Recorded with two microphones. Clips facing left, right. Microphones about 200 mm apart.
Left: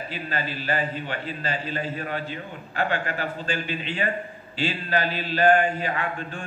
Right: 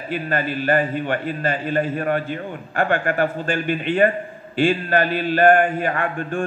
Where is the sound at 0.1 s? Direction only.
55° right (ahead or behind).